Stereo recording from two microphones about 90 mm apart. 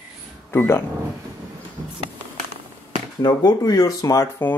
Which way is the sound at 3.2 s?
50° left (ahead or behind).